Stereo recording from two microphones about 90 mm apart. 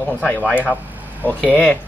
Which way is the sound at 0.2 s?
15° left (ahead or behind).